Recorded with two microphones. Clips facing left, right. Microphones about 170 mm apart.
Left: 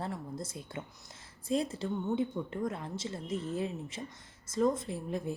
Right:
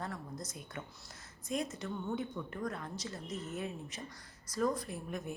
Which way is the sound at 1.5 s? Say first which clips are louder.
Left 5 dB; 30° left (ahead or behind).